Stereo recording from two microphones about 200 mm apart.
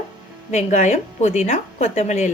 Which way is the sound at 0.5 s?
35° left (ahead or behind).